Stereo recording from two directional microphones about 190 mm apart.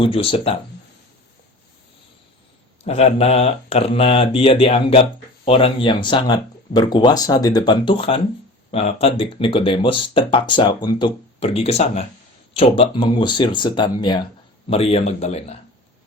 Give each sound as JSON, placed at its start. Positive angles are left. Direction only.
{"t": 0.0, "sound": "speech", "side_deg": 30}
{"t": 2.8, "sound": "speech", "side_deg": 35}